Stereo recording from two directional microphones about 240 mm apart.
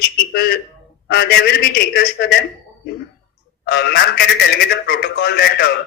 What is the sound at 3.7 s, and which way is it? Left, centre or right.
A woman's voice, left.